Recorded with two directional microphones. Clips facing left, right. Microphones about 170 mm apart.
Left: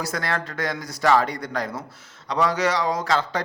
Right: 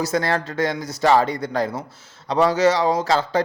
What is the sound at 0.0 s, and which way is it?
A man's voice, 25° right (ahead or behind).